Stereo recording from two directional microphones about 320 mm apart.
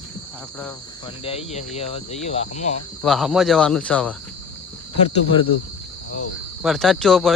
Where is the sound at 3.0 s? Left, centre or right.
Centre.